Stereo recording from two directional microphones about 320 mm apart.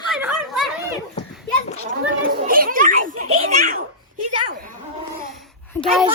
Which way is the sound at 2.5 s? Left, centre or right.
Right.